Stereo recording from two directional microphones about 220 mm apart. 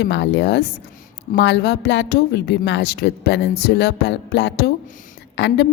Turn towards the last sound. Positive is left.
turn(degrees=50)  # may be behind; listen again after turning